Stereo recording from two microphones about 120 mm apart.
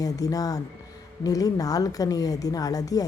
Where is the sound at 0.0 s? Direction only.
30° left (ahead or behind).